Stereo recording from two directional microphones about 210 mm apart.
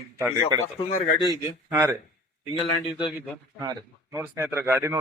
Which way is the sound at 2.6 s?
25° left (ahead or behind).